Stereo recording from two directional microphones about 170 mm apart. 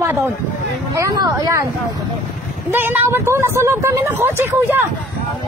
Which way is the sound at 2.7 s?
10° right (ahead or behind).